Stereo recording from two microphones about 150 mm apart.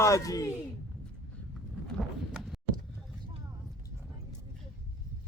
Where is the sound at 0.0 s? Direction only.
20° left (ahead or behind).